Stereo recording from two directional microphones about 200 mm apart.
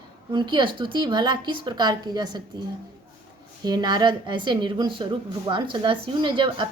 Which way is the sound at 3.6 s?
20° right (ahead or behind).